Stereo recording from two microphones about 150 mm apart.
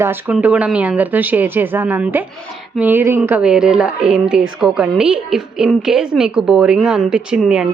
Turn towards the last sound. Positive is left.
turn(degrees=-5)  # may be behind; listen again after turning